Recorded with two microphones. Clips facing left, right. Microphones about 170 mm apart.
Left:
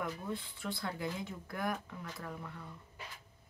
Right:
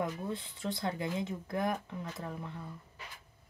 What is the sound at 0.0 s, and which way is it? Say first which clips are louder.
Speech: right 3 dB; 20° right (ahead or behind).